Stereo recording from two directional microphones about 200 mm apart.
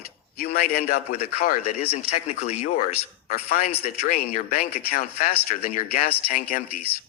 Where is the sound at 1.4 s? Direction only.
45° left (ahead or behind).